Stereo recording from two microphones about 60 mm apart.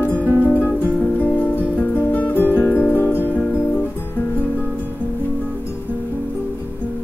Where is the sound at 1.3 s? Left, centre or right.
Left.